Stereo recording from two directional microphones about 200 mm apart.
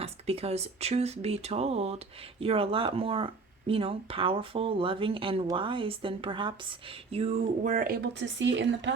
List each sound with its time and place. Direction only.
0.0 s speech: 30° right (ahead or behind); by 8.9 s 65° right (ahead or behind)